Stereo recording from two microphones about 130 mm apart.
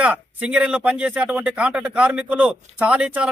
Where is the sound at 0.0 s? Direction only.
10° right (ahead or behind).